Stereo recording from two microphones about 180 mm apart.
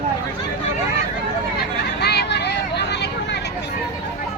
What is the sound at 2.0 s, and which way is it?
Vehicle, 65° left (ahead or behind).